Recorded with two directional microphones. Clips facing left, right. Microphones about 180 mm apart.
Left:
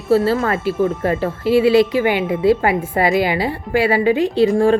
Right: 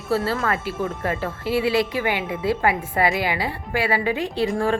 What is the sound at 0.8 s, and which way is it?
Speech, 35° left (ahead or behind).